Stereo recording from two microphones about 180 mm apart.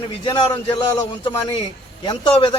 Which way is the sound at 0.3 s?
25° left (ahead or behind).